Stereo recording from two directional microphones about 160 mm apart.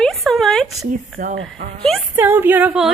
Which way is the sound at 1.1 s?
60° right (ahead or behind).